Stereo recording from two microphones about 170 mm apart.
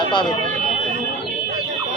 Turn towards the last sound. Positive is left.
turn(degrees=25)  # may be behind; listen again after turning